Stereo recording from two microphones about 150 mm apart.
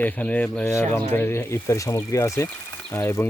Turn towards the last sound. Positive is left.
turn(degrees=15)  # may be behind; listen again after turning